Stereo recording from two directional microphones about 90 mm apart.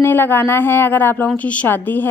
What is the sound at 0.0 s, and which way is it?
A woman's voice, 25° left (ahead or behind).